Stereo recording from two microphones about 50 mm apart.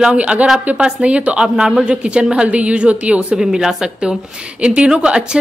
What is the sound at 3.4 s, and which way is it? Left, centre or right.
A woman's voice, centre.